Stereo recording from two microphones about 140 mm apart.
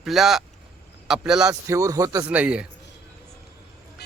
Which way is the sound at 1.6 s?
20° right (ahead or behind).